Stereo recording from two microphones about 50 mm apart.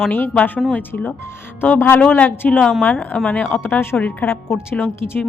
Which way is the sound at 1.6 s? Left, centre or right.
Left.